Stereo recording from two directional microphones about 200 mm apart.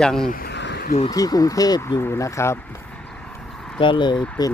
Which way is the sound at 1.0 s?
20° left (ahead or behind).